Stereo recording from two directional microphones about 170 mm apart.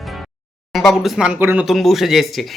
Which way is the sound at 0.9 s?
Centre (ahead or behind).